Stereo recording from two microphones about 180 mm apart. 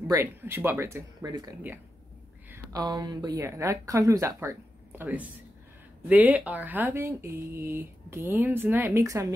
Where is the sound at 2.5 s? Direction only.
20° right (ahead or behind).